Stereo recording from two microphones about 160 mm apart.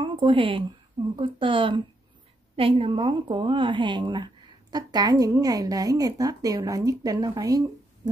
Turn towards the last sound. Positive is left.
turn(degrees=-25)  # may be behind; listen again after turning